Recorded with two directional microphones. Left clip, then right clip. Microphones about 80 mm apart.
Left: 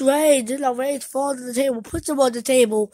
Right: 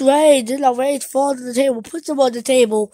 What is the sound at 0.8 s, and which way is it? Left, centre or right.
Speech, right.